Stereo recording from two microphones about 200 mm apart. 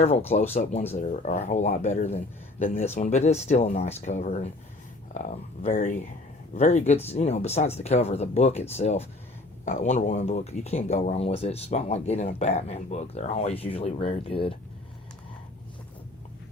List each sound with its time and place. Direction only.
0.5 s speech: 30° left (ahead or behind)